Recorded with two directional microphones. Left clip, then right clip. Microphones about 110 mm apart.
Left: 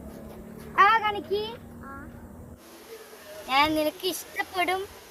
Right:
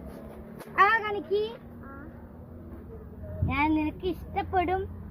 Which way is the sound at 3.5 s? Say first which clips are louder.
Left 4 dB; 60° left (ahead or behind).